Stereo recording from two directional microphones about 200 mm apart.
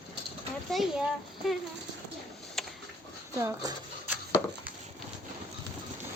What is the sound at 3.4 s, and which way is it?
Speech, 15° right (ahead or behind).